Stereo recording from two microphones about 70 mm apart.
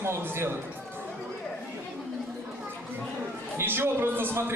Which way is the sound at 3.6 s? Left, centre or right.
Right.